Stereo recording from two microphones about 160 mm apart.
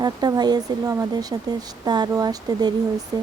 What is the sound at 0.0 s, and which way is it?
Speech, 25° right (ahead or behind).